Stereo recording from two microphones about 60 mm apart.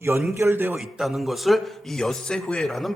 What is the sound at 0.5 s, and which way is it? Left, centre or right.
Speech, right.